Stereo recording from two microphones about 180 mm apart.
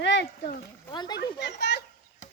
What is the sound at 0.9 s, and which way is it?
Speech, 25° left (ahead or behind).